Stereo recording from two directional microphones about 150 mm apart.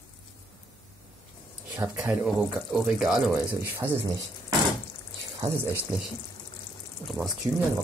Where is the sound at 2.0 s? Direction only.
5° right (ahead or behind).